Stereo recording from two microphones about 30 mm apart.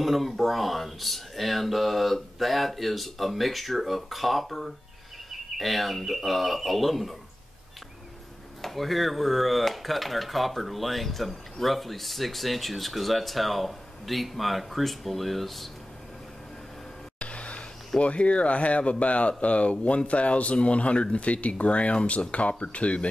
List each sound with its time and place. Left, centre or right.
0.0 s speech: centre
5.6 s speech: centre
8.6 s speech: centre
17.2 s a sound: left
18.0 s speech: left